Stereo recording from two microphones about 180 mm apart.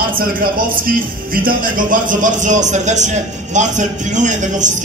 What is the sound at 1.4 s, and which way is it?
Speech, 50° right (ahead or behind).